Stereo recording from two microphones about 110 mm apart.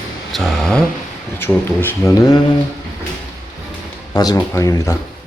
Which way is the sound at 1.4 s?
20° left (ahead or behind).